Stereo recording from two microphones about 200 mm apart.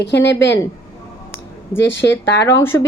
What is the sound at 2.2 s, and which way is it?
Speech, 60° left (ahead or behind).